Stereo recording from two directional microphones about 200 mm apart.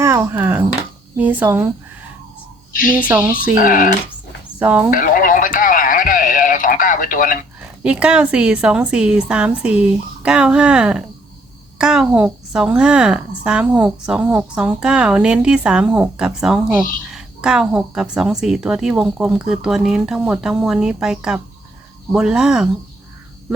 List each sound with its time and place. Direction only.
0.0 s a sound: 10° right (ahead or behind)
1.1 s speech: 10° right (ahead or behind)
3.1 s speech: 10° right (ahead or behind)
3.6 s speech: 45° left (ahead or behind)
4.6 s speech: 5° right (ahead or behind)
4.9 s radio: 45° left (ahead or behind)
7.8 s a woman's voice: 5° right (ahead or behind)